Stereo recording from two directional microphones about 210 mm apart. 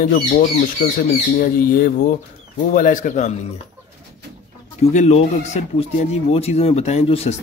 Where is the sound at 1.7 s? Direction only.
45° left (ahead or behind).